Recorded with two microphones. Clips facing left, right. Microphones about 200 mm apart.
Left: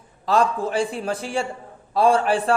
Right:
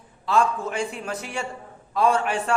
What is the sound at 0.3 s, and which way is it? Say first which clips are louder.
A man's voice: left 2 dB; 35° left (ahead or behind).